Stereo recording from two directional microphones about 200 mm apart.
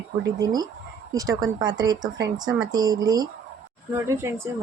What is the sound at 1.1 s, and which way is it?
A woman's voice, 15° right (ahead or behind).